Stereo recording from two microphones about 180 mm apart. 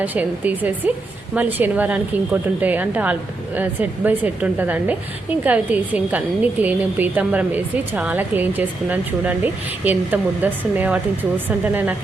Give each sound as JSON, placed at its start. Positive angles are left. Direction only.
{"t": 0.0, "sound": "a woman's voice", "side_deg": -10}